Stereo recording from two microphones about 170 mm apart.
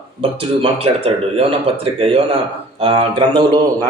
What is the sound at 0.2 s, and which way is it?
Speech, 35° right (ahead or behind).